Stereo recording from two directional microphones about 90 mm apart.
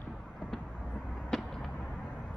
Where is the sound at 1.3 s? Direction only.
5° left (ahead or behind).